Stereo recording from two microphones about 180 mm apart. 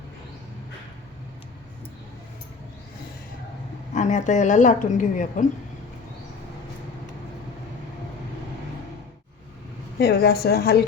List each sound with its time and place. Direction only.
3.9 s speech: 40° left (ahead or behind)
10.0 s a woman's voice: 60° left (ahead or behind)